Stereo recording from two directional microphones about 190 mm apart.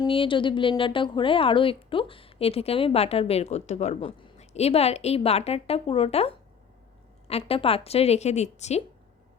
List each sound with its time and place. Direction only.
0.0 s a woman's voice: 25° left (ahead or behind)